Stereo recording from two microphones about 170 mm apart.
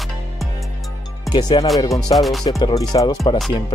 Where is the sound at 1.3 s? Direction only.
25° left (ahead or behind).